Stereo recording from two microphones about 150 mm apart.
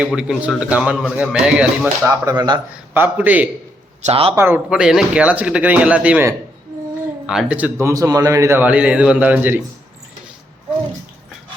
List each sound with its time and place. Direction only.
0.2 s a man's voice: 5° right (ahead or behind)
2.0 s a man's voice: 25° right (ahead or behind)
4.0 s a man's voice: 40° right (ahead or behind)
4.4 s a man's voice: 15° right (ahead or behind)
4.7 s a man's voice: 5° right (ahead or behind)